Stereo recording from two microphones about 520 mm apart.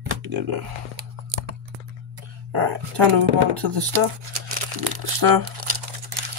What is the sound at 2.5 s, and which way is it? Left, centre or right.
Speech, right.